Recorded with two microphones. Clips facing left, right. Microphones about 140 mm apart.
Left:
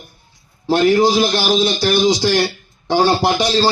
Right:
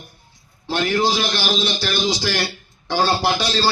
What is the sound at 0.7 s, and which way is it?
A man's voice, 40° left (ahead or behind).